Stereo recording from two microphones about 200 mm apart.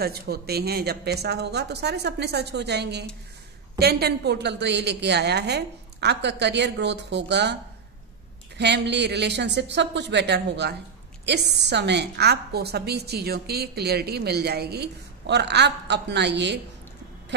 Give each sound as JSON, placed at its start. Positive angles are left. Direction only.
{"t": 0.0, "sound": "a woman's voice", "side_deg": -50}
{"t": 8.5, "sound": "a woman's voice", "side_deg": -55}